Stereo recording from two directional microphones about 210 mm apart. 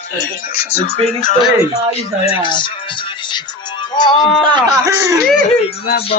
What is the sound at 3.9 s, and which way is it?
Speech, 20° left (ahead or behind).